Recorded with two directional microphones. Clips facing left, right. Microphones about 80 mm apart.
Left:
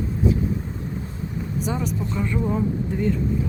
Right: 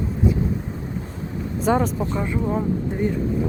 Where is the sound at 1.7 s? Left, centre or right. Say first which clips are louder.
Right 10 dB; right.